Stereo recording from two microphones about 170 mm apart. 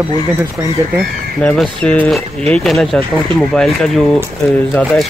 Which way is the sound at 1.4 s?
5° left (ahead or behind).